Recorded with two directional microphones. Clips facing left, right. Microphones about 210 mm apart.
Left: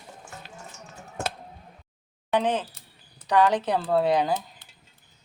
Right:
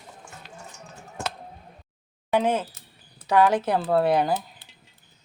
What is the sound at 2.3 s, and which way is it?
Speech, 10° right (ahead or behind).